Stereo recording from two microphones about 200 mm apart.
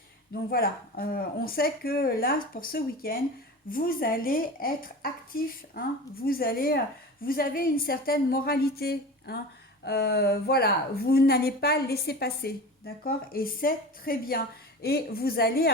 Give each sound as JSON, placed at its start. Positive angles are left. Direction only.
{"t": 0.5, "sound": "speech", "side_deg": 50}